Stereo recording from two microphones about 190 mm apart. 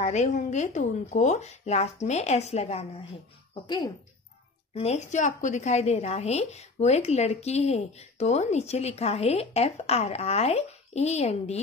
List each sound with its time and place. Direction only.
0.0 s a woman's voice: 40° left (ahead or behind); by 3.9 s 25° left (ahead or behind)
4.7 s a woman's voice: 35° left (ahead or behind)